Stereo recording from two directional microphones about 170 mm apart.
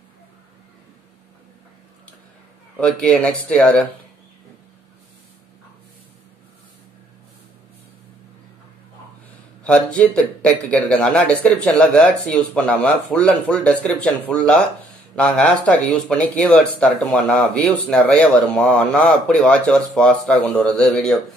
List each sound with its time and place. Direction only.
2.8 s speech: 5° left (ahead or behind)
9.6 s a man's voice: 5° left (ahead or behind)